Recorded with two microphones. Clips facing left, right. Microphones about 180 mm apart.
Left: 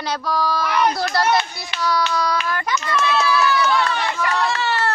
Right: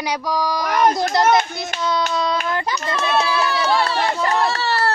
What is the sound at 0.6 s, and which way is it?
Speech, 45° right (ahead or behind).